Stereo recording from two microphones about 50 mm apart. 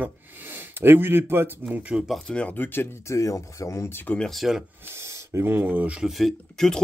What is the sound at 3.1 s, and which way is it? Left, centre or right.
Speech, left.